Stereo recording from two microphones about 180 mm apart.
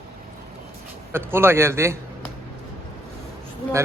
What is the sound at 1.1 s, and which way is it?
Speech, 15° right (ahead or behind).